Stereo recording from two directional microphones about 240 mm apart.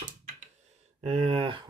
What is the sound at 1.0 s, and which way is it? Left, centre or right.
Speech, right.